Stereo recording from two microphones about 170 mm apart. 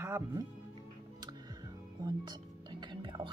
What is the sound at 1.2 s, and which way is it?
Music, 25° right (ahead or behind).